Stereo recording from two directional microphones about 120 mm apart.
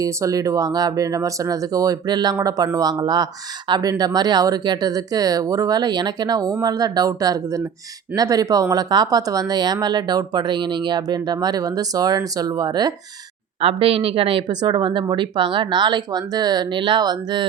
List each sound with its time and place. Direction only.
0.0 s speech: 30° right (ahead or behind)
13.6 s speech: 55° right (ahead or behind); by 17.4 s 35° right (ahead or behind)